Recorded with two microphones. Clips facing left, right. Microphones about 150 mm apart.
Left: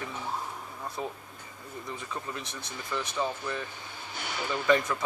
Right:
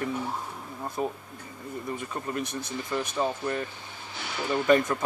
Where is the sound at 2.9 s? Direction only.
35° right (ahead or behind).